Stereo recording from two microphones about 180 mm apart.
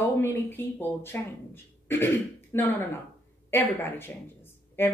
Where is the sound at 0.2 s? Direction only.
10° left (ahead or behind).